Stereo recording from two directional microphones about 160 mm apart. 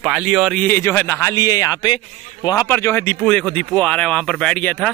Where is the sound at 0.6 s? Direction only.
15° left (ahead or behind).